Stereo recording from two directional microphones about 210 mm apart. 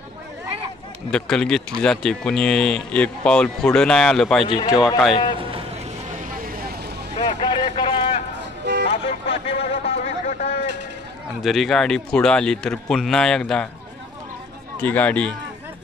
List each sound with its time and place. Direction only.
1.1 s speech: 5° left (ahead or behind)
4.5 s speech: 20° left (ahead or behind)
5.3 s vehicle: 25° right (ahead or behind)
6.3 s vehicle: 45° right (ahead or behind)
7.2 s vehicle: 20° left (ahead or behind)
8.9 s a sound: 25° left (ahead or behind)
11.4 s speech: centre (ahead or behind)
14.8 s speech: 10° left (ahead or behind)